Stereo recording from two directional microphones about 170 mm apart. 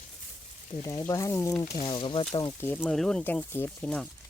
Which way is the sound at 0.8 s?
20° left (ahead or behind).